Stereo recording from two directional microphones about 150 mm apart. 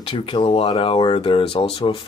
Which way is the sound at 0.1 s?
35° left (ahead or behind).